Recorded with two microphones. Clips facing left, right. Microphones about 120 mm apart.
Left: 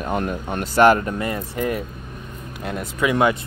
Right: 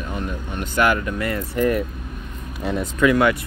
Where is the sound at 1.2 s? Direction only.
20° left (ahead or behind).